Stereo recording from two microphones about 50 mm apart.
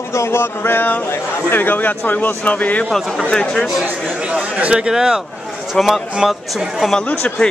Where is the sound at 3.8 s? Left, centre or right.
Right.